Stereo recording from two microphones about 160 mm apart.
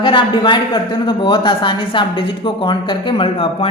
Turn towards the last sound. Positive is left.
turn(degrees=35)  # may be behind; listen again after turning